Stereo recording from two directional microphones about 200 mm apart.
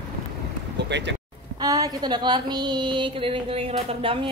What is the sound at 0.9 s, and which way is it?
Speech, 60° right (ahead or behind).